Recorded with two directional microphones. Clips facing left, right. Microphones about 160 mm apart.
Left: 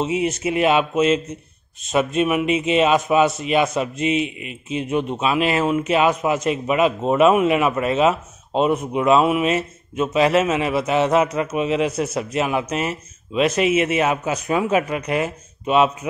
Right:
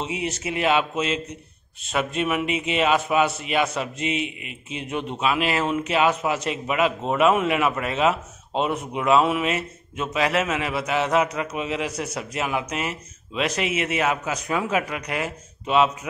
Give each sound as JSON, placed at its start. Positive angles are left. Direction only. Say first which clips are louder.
{"t": 0.0, "sound": "a man's voice", "louder": "left 7 dB", "side_deg": 20}